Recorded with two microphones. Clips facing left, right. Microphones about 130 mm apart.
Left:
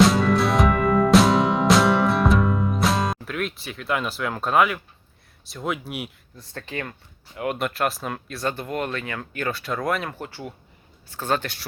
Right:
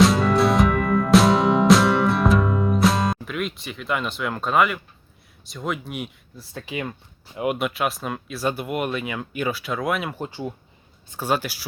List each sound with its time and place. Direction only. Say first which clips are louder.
0.0 s music: right 1 dB; centre (ahead or behind)
5.5 s speech: even; 5° left (ahead or behind)
6.5 s speech: right 2 dB; 10° right (ahead or behind)
7.6 s speech: even; centre (ahead or behind)
9.5 s speech: even; centre (ahead or behind)
10.2 s speech: right 4 dB; 20° right (ahead or behind)